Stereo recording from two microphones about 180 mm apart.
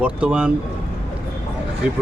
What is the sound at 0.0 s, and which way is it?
Speech, 5° right (ahead or behind).